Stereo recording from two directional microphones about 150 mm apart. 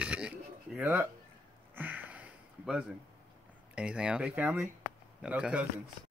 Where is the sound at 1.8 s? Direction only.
10° right (ahead or behind).